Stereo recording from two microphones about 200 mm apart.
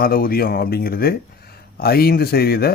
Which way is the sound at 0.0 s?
45° left (ahead or behind).